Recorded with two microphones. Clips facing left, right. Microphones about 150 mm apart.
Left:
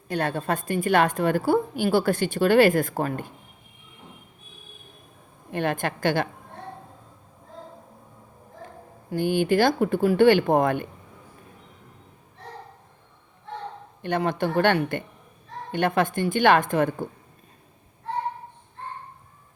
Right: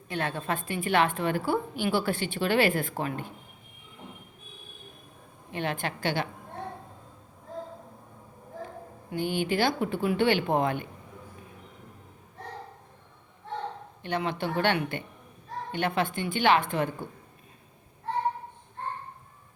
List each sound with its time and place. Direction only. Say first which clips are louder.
0.1 s a woman's voice: left 5 dB; 40° left (ahead or behind)
5.5 s a woman's voice: left 5 dB; 50° left (ahead or behind)
9.1 s a woman's voice: left 6 dB; 45° left (ahead or behind)
14.0 s a woman's voice: left 5 dB; 45° left (ahead or behind)